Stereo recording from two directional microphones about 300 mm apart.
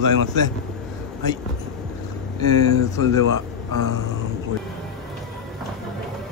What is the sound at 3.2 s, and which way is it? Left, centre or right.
Speech, right.